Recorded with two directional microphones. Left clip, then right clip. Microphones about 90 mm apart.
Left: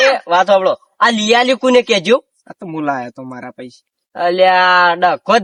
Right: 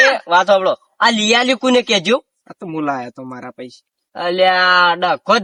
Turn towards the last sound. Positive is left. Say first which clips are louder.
# left 2 dB
turn(degrees=5)  # may be behind; listen again after turning